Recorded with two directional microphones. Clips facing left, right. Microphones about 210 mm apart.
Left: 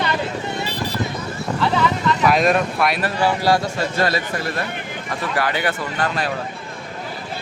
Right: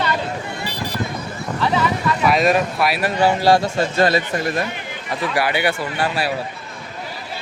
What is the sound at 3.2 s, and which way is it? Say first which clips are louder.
A man's voice: right 3 dB; 25° right (ahead or behind).